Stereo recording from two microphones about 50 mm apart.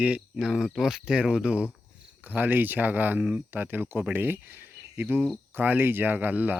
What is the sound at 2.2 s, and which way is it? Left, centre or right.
Speech, right.